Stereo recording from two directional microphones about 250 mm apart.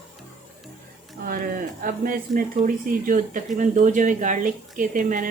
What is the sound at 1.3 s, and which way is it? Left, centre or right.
Speech, right.